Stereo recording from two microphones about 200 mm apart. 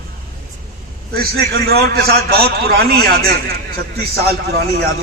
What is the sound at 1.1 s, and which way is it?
A man's voice, 50° right (ahead or behind).